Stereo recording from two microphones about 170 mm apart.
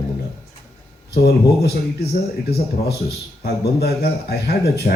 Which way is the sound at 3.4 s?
70° left (ahead or behind).